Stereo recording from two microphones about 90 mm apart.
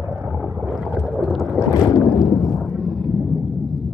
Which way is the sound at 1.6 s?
40° left (ahead or behind).